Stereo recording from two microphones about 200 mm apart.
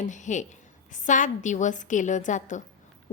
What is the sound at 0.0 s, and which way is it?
A woman's voice, 40° left (ahead or behind).